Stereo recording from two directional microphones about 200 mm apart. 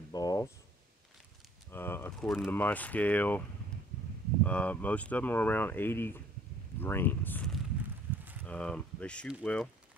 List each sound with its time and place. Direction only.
0.1 s a sound: 20° left (ahead or behind)
1.7 s speech: 10° left (ahead or behind)
2.2 s speech: centre (ahead or behind)
4.5 s speech: 5° left (ahead or behind)